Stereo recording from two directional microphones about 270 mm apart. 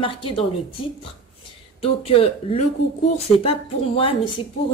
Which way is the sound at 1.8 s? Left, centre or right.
Left.